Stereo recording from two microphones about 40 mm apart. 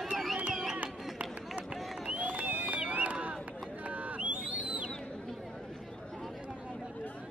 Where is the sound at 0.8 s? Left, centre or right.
Right.